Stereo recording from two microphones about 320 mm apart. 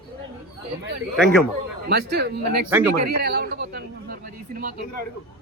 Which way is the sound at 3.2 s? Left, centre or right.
Right.